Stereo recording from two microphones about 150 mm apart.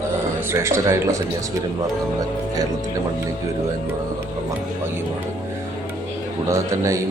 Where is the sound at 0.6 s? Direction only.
20° right (ahead or behind).